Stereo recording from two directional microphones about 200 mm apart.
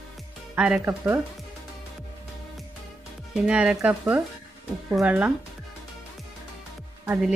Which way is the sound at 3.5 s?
5° right (ahead or behind).